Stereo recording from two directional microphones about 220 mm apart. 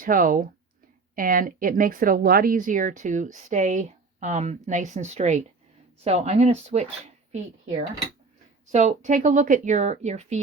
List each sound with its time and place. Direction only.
0.0 s speech: 40° right (ahead or behind)
8.7 s speech: 35° right (ahead or behind)